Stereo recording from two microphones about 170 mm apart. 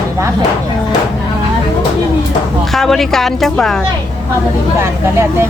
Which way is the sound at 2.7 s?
Centre (ahead or behind).